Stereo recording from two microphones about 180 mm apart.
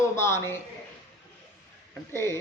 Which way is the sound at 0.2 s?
15° left (ahead or behind).